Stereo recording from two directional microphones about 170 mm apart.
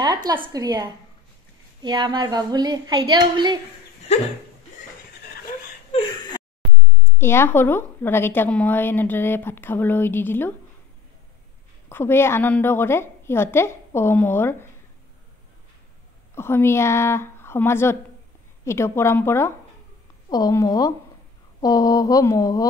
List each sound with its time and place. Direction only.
0.0 s a woman's voice: 25° right (ahead or behind)
7.1 s a woman's voice: 15° left (ahead or behind)
11.9 s a woman's voice: 15° left (ahead or behind)
16.3 s a woman's voice: 15° left (ahead or behind)